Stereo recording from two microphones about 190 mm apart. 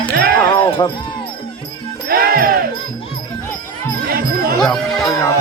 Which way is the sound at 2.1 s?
50° right (ahead or behind).